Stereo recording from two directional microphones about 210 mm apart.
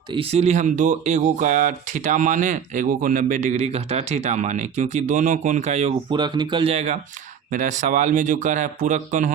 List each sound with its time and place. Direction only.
0.1 s speech: 25° right (ahead or behind)
6.1 s speech: 20° right (ahead or behind); by 9.3 s 35° right (ahead or behind)